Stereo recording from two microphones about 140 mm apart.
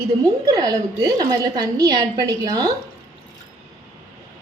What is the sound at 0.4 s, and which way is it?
A woman's voice, 25° right (ahead or behind).